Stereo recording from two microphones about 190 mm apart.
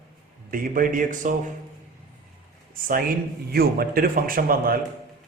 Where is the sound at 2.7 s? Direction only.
45° right (ahead or behind).